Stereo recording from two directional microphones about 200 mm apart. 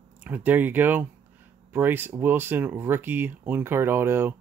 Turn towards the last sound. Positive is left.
turn(degrees=-10)  # may be behind; listen again after turning